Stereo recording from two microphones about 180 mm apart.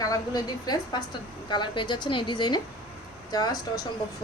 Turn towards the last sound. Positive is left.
turn(degrees=20)  # may be behind; listen again after turning